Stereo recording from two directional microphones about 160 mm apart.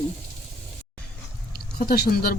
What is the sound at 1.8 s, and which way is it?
Speech, 70° left (ahead or behind).